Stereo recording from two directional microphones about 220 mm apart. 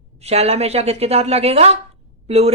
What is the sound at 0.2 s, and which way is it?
A woman's voice, 30° right (ahead or behind).